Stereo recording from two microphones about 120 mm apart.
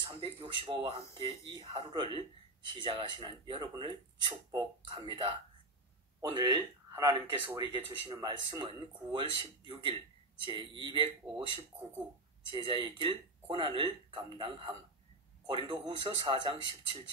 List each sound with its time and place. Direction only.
0.0 s speech: 40° right (ahead or behind)
6.3 s a man's voice: 30° right (ahead or behind)